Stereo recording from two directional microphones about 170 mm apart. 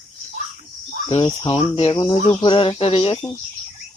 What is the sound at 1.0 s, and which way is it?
Speech, 30° left (ahead or behind).